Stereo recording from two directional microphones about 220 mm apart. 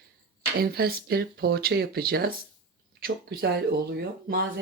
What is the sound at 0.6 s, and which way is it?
Speech, 45° right (ahead or behind).